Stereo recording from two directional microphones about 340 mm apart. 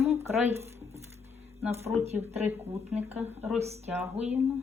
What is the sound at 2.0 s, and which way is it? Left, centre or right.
Speech, centre.